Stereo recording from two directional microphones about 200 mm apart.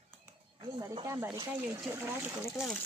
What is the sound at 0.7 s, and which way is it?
Speech, 20° right (ahead or behind).